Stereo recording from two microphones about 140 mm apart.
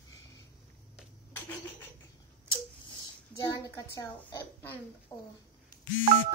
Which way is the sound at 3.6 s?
25° left (ahead or behind).